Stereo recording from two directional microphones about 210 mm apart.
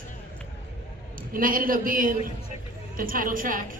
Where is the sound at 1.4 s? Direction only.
40° right (ahead or behind).